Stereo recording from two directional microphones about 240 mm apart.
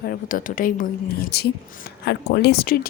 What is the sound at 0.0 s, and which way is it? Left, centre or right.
Speech, left.